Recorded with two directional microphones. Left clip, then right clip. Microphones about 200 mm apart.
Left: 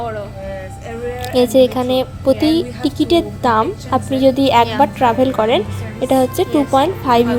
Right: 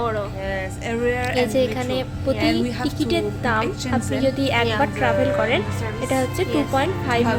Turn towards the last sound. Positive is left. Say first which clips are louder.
# left 8 dB
turn(degrees=20)  # may be behind; listen again after turning